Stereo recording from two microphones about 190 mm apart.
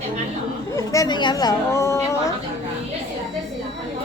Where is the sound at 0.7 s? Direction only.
15° left (ahead or behind).